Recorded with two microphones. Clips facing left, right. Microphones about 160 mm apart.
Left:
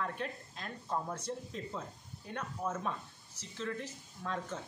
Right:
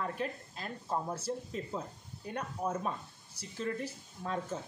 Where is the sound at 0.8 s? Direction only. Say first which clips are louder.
Right 2 dB; 20° right (ahead or behind).